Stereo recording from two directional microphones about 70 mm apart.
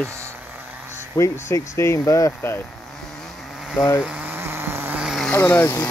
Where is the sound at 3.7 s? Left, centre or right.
Left.